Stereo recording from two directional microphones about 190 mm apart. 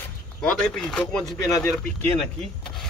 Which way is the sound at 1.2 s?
20° left (ahead or behind).